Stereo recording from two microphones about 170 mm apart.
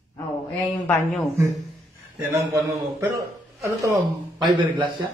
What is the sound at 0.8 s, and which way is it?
Speech, 10° left (ahead or behind).